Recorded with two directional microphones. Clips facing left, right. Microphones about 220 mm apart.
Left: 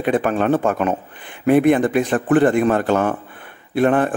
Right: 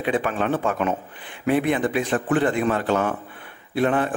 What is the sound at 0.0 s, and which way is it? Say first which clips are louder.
A man's voice: left 5 dB; 45° left (ahead or behind).